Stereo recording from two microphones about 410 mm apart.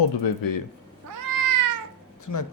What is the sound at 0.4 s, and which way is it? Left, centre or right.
Speech, left.